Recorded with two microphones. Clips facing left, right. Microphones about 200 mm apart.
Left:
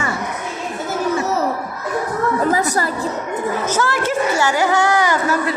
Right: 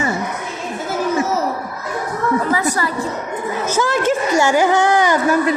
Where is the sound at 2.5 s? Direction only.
40° left (ahead or behind).